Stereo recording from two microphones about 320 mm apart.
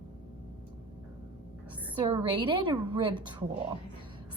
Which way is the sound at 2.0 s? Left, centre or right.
Centre.